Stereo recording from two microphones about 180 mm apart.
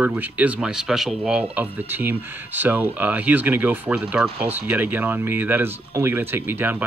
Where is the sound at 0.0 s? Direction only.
10° right (ahead or behind).